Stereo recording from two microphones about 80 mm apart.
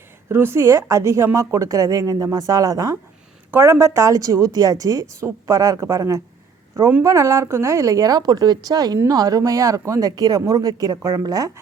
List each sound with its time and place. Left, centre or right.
0.3 s a woman's voice: right
3.5 s a woman's voice: right
10.1 s a woman's voice: right